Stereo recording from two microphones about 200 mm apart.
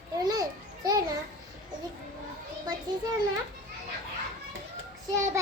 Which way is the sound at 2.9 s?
20° right (ahead or behind).